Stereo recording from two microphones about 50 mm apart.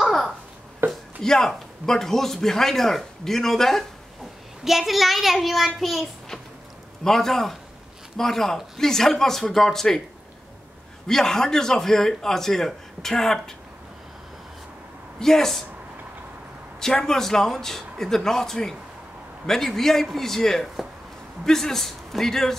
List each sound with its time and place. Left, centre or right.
0.0 s a sound: centre
0.8 s speech: right
1.2 s speech: centre
4.6 s a child's voice: centre
7.1 s a child's voice: centre
11.1 s speech: centre
15.1 s speech: centre
16.8 s speech: centre